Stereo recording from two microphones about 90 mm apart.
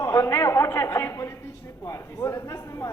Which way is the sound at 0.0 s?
35° left (ahead or behind).